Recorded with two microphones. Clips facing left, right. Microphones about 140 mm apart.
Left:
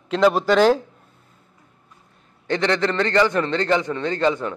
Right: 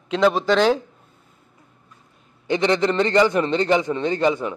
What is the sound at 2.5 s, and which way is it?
A man's voice, 15° right (ahead or behind).